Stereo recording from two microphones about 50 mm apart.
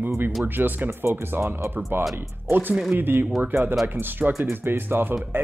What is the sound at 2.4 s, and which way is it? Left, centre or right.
Speech, right.